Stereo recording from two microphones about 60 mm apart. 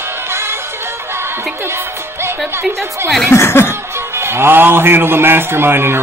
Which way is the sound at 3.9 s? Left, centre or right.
Right.